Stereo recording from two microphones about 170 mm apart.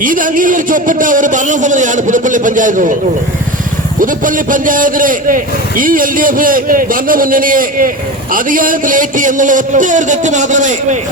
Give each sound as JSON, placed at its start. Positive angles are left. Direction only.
{"t": 0.0, "sound": "a man's voice", "side_deg": -55}
{"t": 4.0, "sound": "a man's voice", "side_deg": -50}